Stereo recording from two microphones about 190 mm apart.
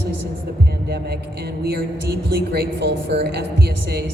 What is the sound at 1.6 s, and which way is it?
A man's voice, 60° right (ahead or behind).